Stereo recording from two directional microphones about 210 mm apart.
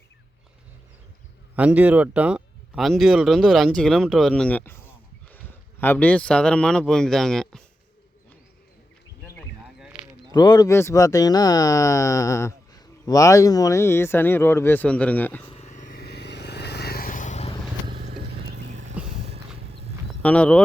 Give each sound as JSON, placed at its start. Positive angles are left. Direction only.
{"t": 1.5, "sound": "speech", "side_deg": -5}
{"t": 9.7, "sound": "a sound", "side_deg": -5}
{"t": 10.3, "sound": "speech", "side_deg": 20}
{"t": 15.4, "sound": "vehicle", "side_deg": 30}
{"t": 18.1, "sound": "vehicle", "side_deg": -55}
{"t": 18.7, "sound": "vehicle", "side_deg": -35}
{"t": 20.2, "sound": "speech", "side_deg": 5}